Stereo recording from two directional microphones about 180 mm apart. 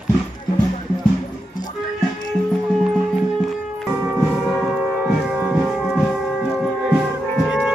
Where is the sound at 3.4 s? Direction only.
Centre (ahead or behind).